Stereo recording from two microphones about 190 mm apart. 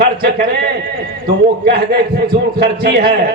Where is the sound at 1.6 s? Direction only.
55° right (ahead or behind).